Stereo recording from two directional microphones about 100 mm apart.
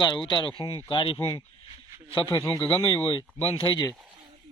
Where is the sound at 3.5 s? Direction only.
50° left (ahead or behind).